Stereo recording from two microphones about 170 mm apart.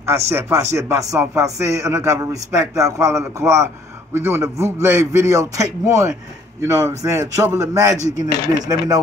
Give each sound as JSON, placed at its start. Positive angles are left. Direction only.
{"t": 0.3, "sound": "speech", "side_deg": -15}